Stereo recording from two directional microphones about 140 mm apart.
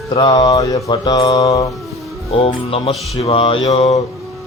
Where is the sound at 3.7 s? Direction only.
55° left (ahead or behind).